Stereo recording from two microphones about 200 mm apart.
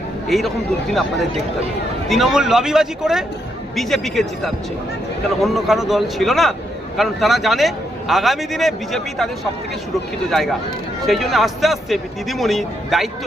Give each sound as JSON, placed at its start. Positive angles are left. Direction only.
{"t": 0.3, "sound": "a man's voice", "side_deg": 0}
{"t": 2.0, "sound": "a man's voice", "side_deg": 0}